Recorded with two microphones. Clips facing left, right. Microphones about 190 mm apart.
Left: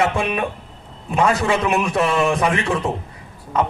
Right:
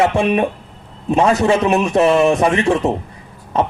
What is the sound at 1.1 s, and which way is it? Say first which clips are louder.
A man's voice: right 5 dB; 20° right (ahead or behind).